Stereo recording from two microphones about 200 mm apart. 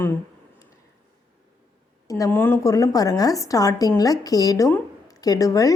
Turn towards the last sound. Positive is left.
turn(degrees=15)  # may be behind; listen again after turning